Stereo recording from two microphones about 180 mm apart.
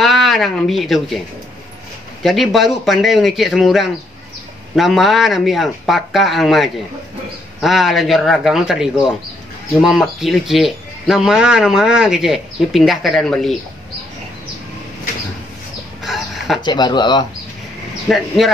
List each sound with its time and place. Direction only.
0.0 s speech: centre (ahead or behind)
2.2 s speech: centre (ahead or behind)
16.0 s a sound: centre (ahead or behind)
16.6 s speech: 25° left (ahead or behind)
18.0 s speech: centre (ahead or behind)